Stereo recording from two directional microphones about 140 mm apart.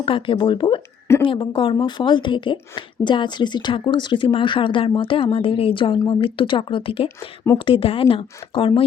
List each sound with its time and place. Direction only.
0.0 s a woman's voice: 40° left (ahead or behind)